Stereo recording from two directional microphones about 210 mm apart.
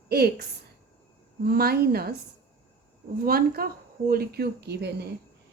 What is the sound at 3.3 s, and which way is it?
A woman's voice, 45° right (ahead or behind).